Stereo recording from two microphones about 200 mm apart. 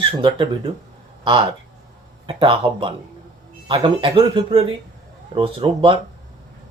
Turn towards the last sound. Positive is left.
turn(degrees=-25)  # may be behind; listen again after turning